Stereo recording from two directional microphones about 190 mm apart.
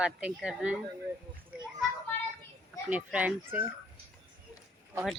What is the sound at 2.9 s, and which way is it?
Speech, 5° right (ahead or behind).